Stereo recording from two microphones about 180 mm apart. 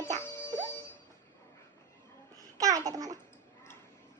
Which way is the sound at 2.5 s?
20° right (ahead or behind).